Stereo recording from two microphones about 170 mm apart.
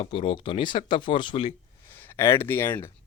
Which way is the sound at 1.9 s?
15° left (ahead or behind).